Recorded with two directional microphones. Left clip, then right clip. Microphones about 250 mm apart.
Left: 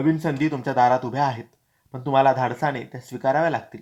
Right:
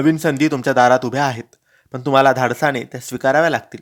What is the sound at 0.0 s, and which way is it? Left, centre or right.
A man's voice, right.